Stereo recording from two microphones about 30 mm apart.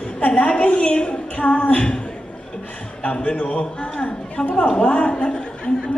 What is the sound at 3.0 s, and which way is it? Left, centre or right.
Speech, left.